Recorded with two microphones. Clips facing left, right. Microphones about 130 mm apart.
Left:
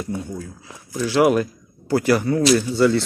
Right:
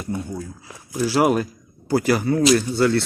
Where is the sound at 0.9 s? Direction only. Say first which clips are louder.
Even; 40° right (ahead or behind).